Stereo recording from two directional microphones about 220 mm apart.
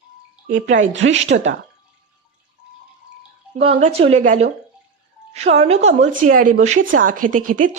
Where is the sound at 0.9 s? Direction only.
55° right (ahead or behind).